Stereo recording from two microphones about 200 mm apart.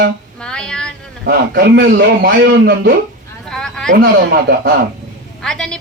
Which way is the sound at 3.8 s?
60° right (ahead or behind).